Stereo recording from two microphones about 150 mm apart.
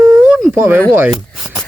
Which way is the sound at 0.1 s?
5° right (ahead or behind).